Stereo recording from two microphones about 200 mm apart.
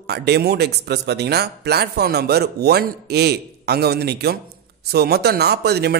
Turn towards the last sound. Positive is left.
turn(degrees=-55)  # may be behind; listen again after turning